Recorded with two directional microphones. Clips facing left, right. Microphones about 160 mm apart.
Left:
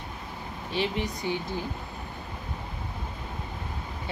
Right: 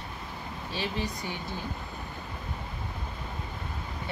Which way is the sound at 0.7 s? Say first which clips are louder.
Left 4 dB; 20° left (ahead or behind).